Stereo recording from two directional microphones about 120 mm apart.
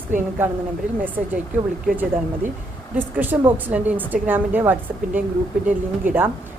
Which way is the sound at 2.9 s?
15° right (ahead or behind).